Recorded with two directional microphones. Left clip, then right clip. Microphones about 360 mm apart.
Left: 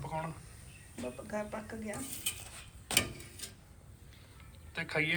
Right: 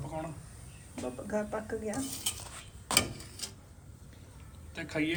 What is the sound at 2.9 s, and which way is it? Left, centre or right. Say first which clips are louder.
Tick-tock: right 3 dB; centre.